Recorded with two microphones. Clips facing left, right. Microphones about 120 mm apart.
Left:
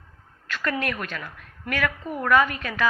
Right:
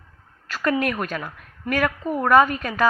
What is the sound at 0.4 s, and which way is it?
A woman's voice, 40° right (ahead or behind).